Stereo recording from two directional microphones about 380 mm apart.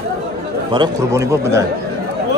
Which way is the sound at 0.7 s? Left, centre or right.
Centre.